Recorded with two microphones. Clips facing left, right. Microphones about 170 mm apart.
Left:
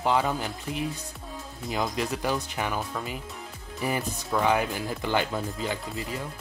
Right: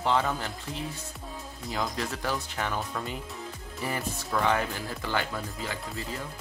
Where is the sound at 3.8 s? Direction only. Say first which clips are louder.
Left 4 dB; 15° left (ahead or behind).